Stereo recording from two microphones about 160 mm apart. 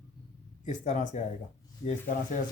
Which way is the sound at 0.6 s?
50° left (ahead or behind).